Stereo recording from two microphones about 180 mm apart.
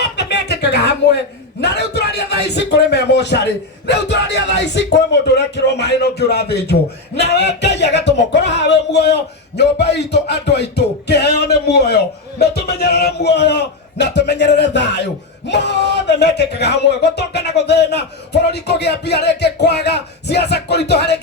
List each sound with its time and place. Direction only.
0.2 s music: 70° left (ahead or behind)
1.6 s a man's voice: 70° left (ahead or behind)